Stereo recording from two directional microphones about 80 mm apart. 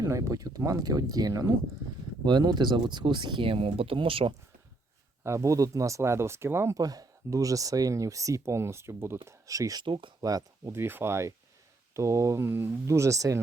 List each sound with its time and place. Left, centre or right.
0.0 s speech: right
2.2 s speech: right
5.2 s speech: right
6.7 s speech: right
9.2 s speech: right
9.8 s speech: right
10.2 s speech: right
10.7 s speech: right